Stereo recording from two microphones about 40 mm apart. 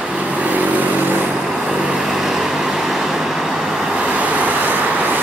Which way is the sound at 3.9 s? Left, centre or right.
Right.